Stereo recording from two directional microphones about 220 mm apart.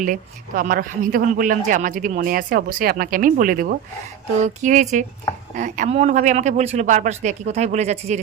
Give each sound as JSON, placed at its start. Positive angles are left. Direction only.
{"t": 0.0, "sound": "speech", "side_deg": -35}